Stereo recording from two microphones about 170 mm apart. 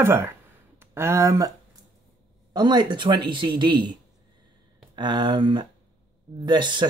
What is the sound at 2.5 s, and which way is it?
Speech, 25° right (ahead or behind).